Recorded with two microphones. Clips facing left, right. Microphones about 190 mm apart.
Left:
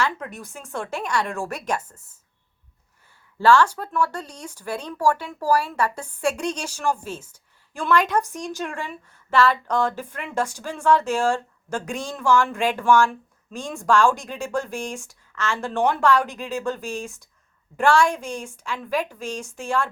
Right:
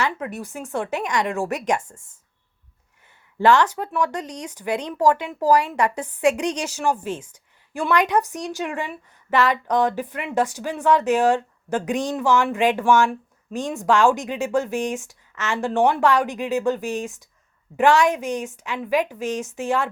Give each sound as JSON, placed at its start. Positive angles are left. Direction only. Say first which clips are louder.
{"t": 0.3, "sound": "a woman's voice", "louder": "right 6 dB", "side_deg": -15}
{"t": 3.3, "sound": "speech", "louder": "even", "side_deg": -20}
{"t": 5.9, "sound": "a woman's voice", "louder": "right 5 dB", "side_deg": 10}
{"t": 6.2, "sound": "a woman's voice", "louder": "right 4 dB", "side_deg": -15}